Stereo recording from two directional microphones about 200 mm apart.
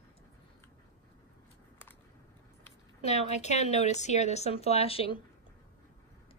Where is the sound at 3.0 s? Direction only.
35° left (ahead or behind).